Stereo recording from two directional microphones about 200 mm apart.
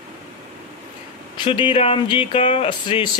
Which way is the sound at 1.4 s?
25° left (ahead or behind).